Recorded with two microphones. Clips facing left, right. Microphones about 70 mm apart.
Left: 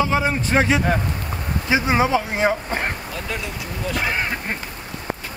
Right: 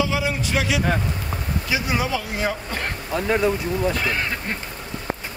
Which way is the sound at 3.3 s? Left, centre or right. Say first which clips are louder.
Right 12 dB; right.